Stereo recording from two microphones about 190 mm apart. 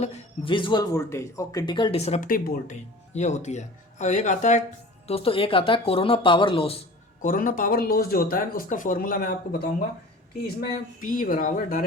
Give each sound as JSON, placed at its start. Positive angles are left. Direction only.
{"t": 0.0, "sound": "speech", "side_deg": 30}
{"t": 3.2, "sound": "speech", "side_deg": 40}
{"t": 7.2, "sound": "speech", "side_deg": 45}
{"t": 11.0, "sound": "speech", "side_deg": 45}